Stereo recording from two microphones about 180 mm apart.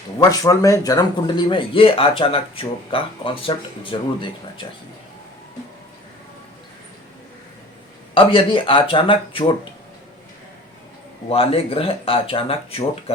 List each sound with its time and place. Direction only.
0.2 s a man's voice: 20° left (ahead or behind)
8.1 s a man's voice: 30° left (ahead or behind)
11.3 s speech: 30° left (ahead or behind)